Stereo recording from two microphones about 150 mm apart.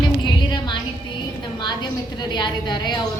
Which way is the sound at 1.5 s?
30° left (ahead or behind).